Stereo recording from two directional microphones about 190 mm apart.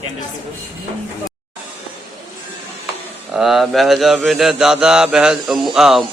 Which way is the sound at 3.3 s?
Centre (ahead or behind).